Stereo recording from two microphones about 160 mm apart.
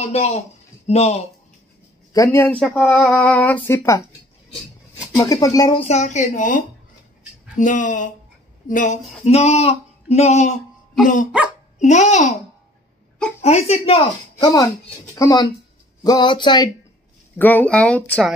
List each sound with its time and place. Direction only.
0.1 s a woman's voice: 40° left (ahead or behind)
2.1 s speech: 15° left (ahead or behind)
2.5 s speech: 5° left (ahead or behind)
5.1 s speech: 20° left (ahead or behind)
5.8 s speech: 45° left (ahead or behind)
11.3 s speech: 10° right (ahead or behind)
11.8 s speech: 45° left (ahead or behind)
13.4 s a woman's voice: 40° left (ahead or behind)
14.4 s speech: 25° left (ahead or behind)
17.4 s speech: 10° left (ahead or behind)